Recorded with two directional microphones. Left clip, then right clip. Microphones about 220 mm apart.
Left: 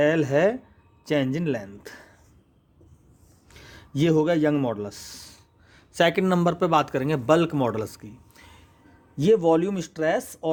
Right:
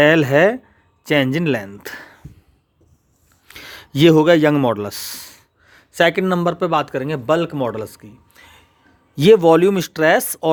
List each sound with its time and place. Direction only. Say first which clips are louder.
0.0 s speech: right 8 dB; 35° right (ahead or behind)
3.5 s speech: right 8 dB; 35° right (ahead or behind); by 8.6 s 15° right (ahead or behind)
9.1 s speech: right 9 dB; 35° right (ahead or behind)